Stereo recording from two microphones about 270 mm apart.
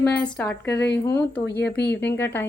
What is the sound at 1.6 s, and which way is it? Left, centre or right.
Speech, left.